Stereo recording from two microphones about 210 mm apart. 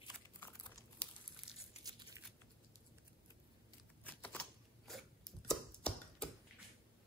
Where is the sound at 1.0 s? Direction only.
5° left (ahead or behind).